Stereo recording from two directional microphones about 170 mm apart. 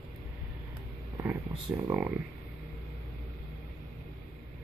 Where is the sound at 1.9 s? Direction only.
15° right (ahead or behind).